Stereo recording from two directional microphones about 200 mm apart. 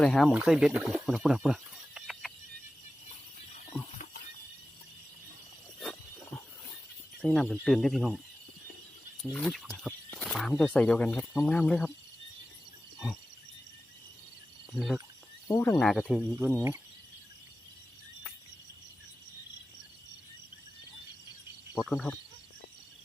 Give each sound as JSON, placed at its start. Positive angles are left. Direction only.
{"t": 0.0, "sound": "speech", "side_deg": 5}
{"t": 1.0, "sound": "a sound", "side_deg": 0}
{"t": 3.9, "sound": "a sound", "side_deg": 45}
{"t": 5.8, "sound": "a sound", "side_deg": 5}
{"t": 7.2, "sound": "speech", "side_deg": 5}
{"t": 9.2, "sound": "speech", "side_deg": 5}
{"t": 14.7, "sound": "speech", "side_deg": 0}
{"t": 15.4, "sound": "speech", "side_deg": 15}
{"t": 15.8, "sound": "speech", "side_deg": 0}
{"t": 21.8, "sound": "speech", "side_deg": 0}